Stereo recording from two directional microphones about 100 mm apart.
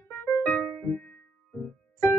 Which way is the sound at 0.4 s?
20° left (ahead or behind).